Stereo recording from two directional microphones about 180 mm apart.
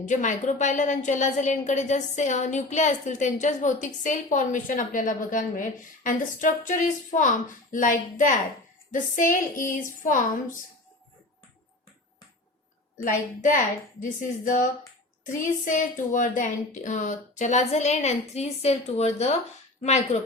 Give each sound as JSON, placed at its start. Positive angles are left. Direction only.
{"t": 0.0, "sound": "a woman's voice", "side_deg": 45}
{"t": 13.1, "sound": "a woman's voice", "side_deg": 50}